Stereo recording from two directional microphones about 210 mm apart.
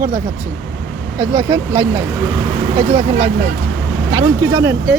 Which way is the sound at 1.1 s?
10° right (ahead or behind).